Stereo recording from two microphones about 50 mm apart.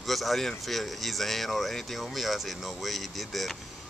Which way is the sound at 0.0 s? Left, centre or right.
Centre.